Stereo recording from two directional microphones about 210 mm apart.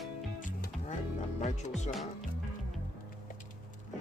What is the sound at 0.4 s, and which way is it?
Music, 40° left (ahead or behind).